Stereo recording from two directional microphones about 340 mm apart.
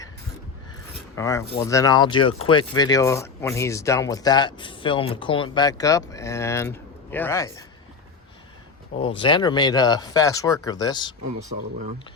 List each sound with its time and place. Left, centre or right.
1.1 s speech: centre
9.0 s speech: centre
11.4 s speech: right